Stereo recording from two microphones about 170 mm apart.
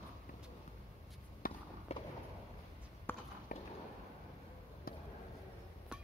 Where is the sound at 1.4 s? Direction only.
55° left (ahead or behind).